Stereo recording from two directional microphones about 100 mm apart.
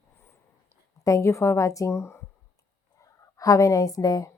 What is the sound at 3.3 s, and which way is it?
Speech, 35° left (ahead or behind).